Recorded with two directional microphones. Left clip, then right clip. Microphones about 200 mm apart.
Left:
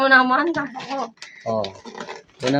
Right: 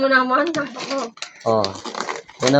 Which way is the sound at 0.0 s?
35° left (ahead or behind).